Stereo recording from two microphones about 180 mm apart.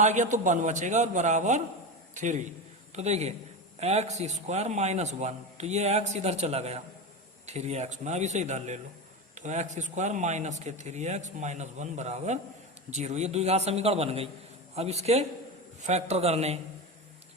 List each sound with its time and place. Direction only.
0.0 s a man's voice: 40° right (ahead or behind)